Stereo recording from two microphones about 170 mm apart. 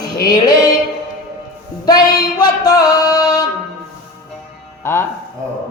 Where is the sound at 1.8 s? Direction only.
25° left (ahead or behind).